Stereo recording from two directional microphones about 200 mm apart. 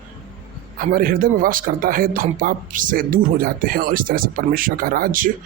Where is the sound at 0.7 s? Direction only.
45° right (ahead or behind).